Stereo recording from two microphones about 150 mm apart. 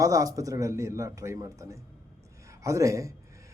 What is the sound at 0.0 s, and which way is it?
Speech, 20° right (ahead or behind).